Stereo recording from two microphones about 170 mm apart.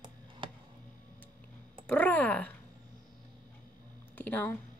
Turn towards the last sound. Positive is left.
turn(degrees=10)  # may be behind; listen again after turning